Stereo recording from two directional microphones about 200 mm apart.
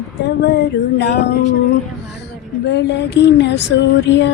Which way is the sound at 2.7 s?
60° left (ahead or behind).